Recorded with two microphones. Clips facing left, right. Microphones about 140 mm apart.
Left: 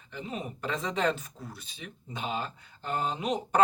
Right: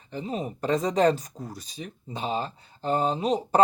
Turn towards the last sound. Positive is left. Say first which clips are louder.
# right 5 dB
turn(degrees=-35)  # may be behind; listen again after turning